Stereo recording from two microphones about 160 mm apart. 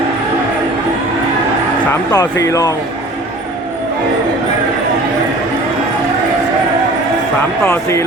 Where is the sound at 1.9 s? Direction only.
25° left (ahead or behind).